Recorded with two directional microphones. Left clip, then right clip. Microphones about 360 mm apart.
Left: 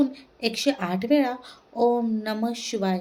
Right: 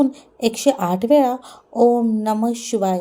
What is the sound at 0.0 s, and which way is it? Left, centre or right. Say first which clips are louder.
Speech: right 6 dB; right.